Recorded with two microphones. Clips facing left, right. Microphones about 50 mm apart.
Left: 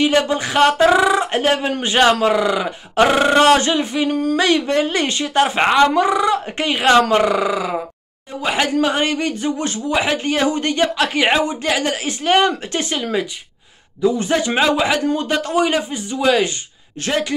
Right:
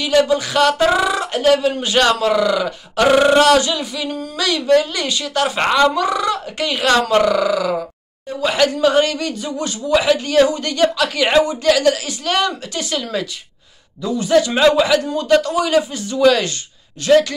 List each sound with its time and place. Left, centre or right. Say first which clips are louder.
0.0 s speech: right 1 dB; left
17.0 s speech: right 9 dB; left